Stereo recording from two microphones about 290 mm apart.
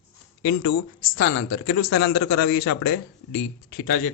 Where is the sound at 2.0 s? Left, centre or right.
Left.